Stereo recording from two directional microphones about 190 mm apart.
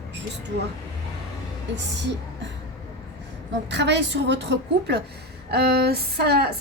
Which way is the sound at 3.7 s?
65° right (ahead or behind).